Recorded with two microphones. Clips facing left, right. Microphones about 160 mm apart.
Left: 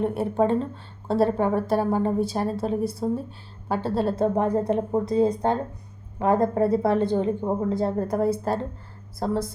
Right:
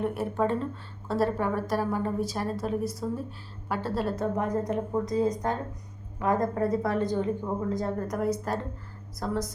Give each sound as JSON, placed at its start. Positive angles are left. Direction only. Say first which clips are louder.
{"t": 0.0, "sound": "a woman's voice", "louder": "left 5 dB", "side_deg": 30}